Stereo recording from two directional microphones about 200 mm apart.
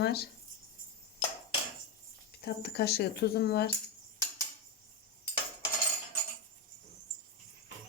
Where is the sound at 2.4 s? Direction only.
55° left (ahead or behind).